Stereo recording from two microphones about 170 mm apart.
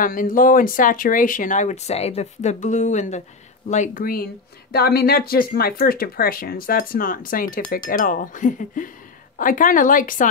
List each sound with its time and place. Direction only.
0.0 s speech: 55° left (ahead or behind)